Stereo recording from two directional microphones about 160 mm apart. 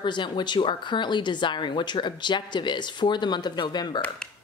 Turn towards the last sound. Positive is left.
turn(degrees=5)  # may be behind; listen again after turning